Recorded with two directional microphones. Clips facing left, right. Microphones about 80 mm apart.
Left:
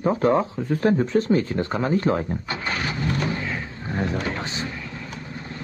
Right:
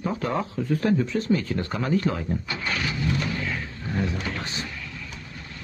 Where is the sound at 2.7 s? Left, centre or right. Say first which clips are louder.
Left 1 dB; left.